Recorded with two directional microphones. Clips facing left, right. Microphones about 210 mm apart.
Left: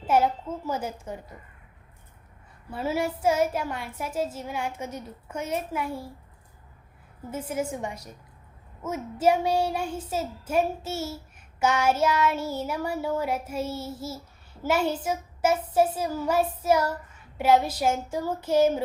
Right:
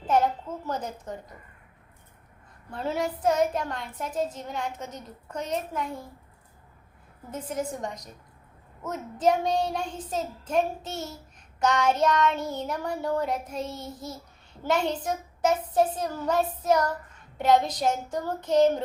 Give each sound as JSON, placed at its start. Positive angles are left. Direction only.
{"t": 0.1, "sound": "a woman's voice", "side_deg": 5}
{"t": 2.6, "sound": "a woman's voice", "side_deg": 5}
{"t": 7.3, "sound": "a woman's voice", "side_deg": 5}